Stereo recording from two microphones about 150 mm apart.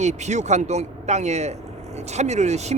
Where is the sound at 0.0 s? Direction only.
50° right (ahead or behind).